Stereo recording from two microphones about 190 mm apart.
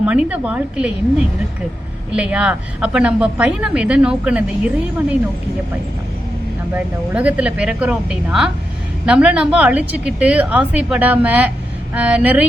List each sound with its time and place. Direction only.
0.0 s a woman's voice: 5° right (ahead or behind)
2.1 s a woman's voice: 5° right (ahead or behind)
6.7 s a woman's voice: 5° right (ahead or behind)